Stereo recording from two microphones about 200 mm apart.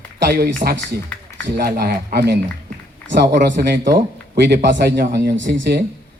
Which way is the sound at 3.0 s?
10° left (ahead or behind).